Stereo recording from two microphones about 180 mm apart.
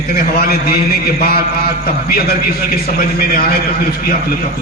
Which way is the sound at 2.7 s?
55° left (ahead or behind).